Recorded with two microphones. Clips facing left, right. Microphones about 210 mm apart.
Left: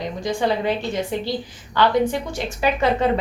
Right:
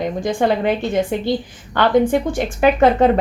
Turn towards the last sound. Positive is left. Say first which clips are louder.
# right 6 dB
turn(degrees=-50)  # may be behind; listen again after turning